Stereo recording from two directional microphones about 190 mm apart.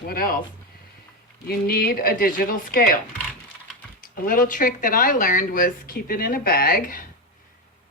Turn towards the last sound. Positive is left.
turn(degrees=50)  # may be behind; listen again after turning